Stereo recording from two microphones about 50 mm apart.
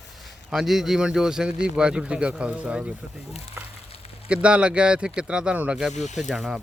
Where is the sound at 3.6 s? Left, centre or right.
Right.